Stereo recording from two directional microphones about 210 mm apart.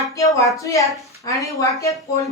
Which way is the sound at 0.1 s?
15° left (ahead or behind).